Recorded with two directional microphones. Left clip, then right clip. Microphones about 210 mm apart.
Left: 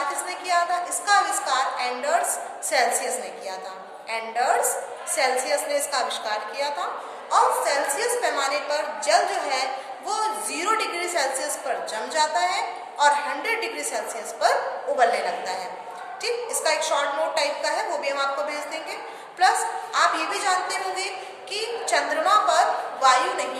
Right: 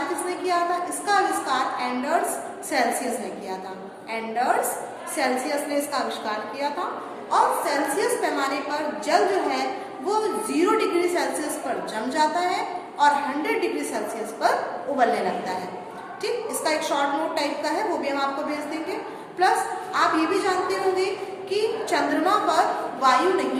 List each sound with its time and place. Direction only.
0.3 s a sound: 20° left (ahead or behind)
2.7 s a woman's voice: 20° left (ahead or behind)
4.1 s a woman's voice: 15° left (ahead or behind)
21.5 s a woman's voice: 15° left (ahead or behind)